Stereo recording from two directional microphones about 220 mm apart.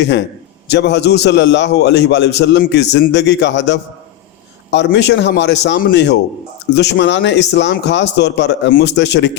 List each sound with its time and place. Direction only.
0.0 s a man's voice: 50° left (ahead or behind)